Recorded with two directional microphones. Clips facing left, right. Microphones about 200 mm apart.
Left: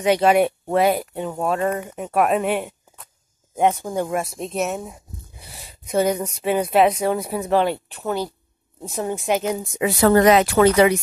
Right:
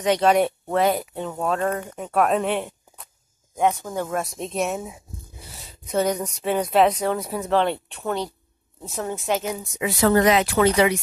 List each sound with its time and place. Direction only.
0.0 s a woman's voice: 10° left (ahead or behind)
3.5 s speech: 20° left (ahead or behind)
4.1 s speech: 5° left (ahead or behind)
5.6 s a woman's voice: 10° left (ahead or behind)
9.8 s speech: 45° left (ahead or behind)